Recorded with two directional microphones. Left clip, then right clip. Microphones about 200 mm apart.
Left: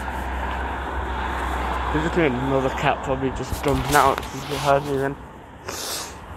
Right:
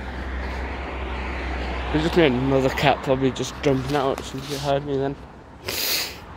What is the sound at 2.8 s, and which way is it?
Speech, 50° right (ahead or behind).